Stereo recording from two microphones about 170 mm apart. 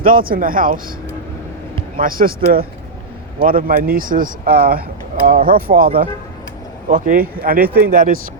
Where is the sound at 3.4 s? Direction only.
55° right (ahead or behind).